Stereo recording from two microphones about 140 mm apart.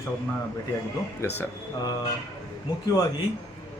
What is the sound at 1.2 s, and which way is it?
Speech, 20° left (ahead or behind).